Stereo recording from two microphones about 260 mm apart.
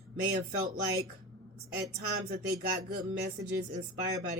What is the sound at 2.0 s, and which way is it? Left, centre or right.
Speech, right.